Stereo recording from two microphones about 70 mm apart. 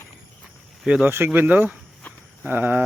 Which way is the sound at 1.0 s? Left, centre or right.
Right.